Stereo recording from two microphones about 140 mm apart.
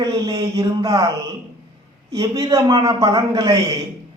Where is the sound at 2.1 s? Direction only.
25° right (ahead or behind).